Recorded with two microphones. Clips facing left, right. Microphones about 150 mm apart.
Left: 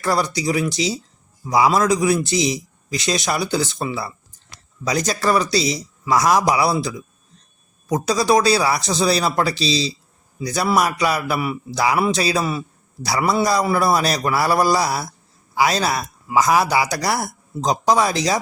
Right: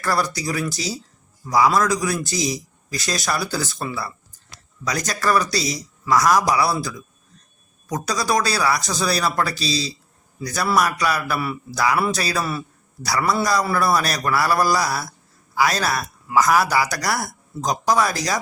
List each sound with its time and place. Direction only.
0.0 s a man's voice: 20° left (ahead or behind)